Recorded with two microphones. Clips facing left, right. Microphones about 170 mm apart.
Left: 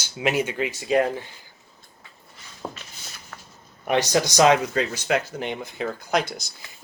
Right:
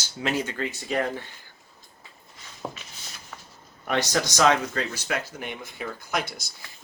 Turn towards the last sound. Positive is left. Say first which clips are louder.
# left 6 dB
turn(degrees=25)  # may be behind; listen again after turning